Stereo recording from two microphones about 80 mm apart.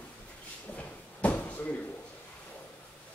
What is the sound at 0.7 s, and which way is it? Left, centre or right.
Drawer open or close, centre.